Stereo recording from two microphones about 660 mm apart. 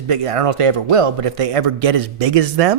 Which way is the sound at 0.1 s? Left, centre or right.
Right.